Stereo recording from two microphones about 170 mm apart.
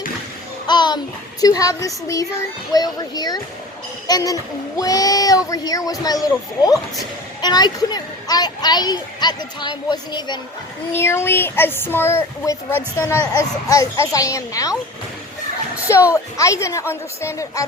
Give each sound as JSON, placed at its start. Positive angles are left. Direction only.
{"t": 0.7, "sound": "music", "side_deg": 25}
{"t": 1.4, "sound": "a woman's voice", "side_deg": 20}
{"t": 10.9, "sound": "speech", "side_deg": 15}
{"t": 15.9, "sound": "speech", "side_deg": 15}